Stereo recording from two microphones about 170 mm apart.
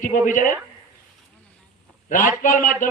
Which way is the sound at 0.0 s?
50° left (ahead or behind).